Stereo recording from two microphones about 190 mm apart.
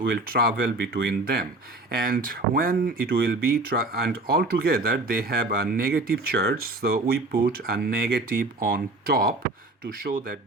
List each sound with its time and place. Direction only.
0.1 s speech: 50° right (ahead or behind)